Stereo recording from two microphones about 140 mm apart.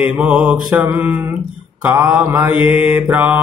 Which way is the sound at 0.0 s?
10° right (ahead or behind).